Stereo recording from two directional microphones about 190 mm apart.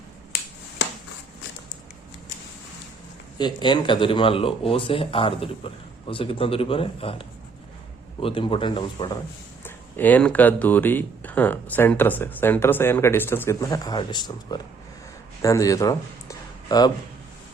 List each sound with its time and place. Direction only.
3.3 s speech: 25° left (ahead or behind)
9.6 s speech: 10° left (ahead or behind)